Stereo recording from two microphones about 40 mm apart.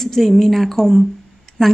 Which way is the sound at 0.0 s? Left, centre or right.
Centre.